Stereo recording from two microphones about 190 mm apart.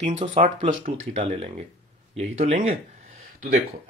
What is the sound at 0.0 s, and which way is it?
Speech, 40° right (ahead or behind).